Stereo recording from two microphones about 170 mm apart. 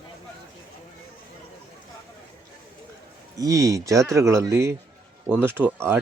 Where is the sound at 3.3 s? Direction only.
20° right (ahead or behind).